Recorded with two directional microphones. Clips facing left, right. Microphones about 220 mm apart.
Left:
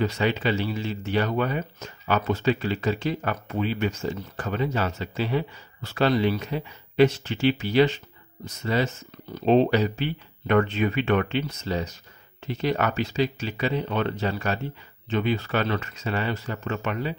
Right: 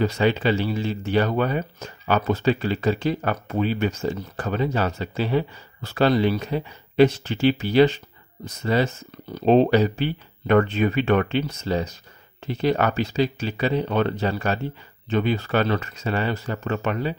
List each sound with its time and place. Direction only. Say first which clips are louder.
0.0 s speech: right 4 dB; 35° right (ahead or behind)
9.3 s speech: right 3 dB; 40° right (ahead or behind)